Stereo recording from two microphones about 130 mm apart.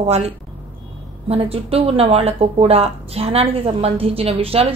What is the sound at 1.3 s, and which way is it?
Speech, 50° right (ahead or behind).